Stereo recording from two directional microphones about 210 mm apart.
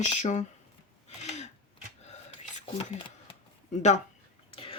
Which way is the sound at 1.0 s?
30° left (ahead or behind).